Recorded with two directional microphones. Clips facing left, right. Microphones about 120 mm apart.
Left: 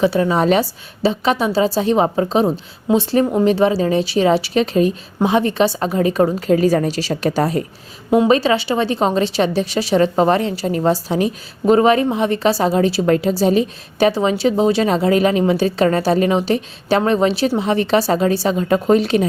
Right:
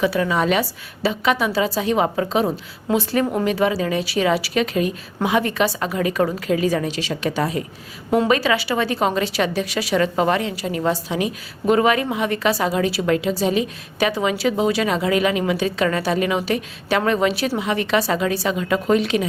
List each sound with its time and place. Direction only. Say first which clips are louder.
0.0 s a woman's voice: left 4 dB; 30° left (ahead or behind)
8.3 s a woman's voice: left 4 dB; 30° left (ahead or behind)